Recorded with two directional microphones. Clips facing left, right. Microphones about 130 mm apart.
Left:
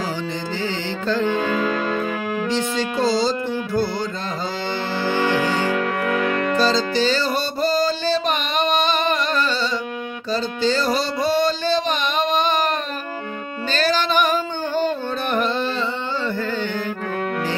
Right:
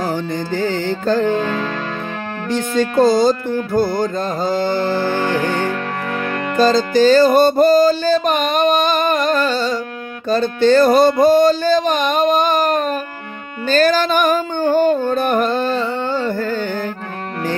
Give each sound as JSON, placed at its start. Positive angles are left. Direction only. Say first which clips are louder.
{"t": 0.6, "sound": "music", "louder": "right 6 dB", "side_deg": -45}
{"t": 1.4, "sound": "music", "louder": "right 1 dB", "side_deg": 5}
{"t": 2.5, "sound": "music", "louder": "right 10 dB", "side_deg": -50}
{"t": 5.7, "sound": "music", "louder": "left 2 dB", "side_deg": 5}
{"t": 6.5, "sound": "music", "louder": "right 9 dB", "side_deg": -50}
{"t": 10.3, "sound": "a sound", "louder": "right 8 dB", "side_deg": -55}
{"t": 13.7, "sound": "music", "louder": "right 7 dB", "side_deg": -45}